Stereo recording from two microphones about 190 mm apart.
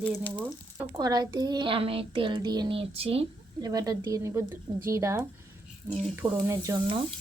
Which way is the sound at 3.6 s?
20° right (ahead or behind).